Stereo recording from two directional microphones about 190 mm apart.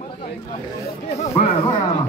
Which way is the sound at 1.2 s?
30° left (ahead or behind).